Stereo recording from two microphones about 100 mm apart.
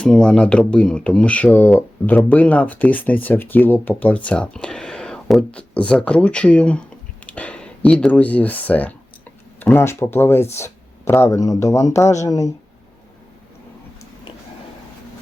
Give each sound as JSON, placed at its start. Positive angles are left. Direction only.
{"t": 0.0, "sound": "speech", "side_deg": 10}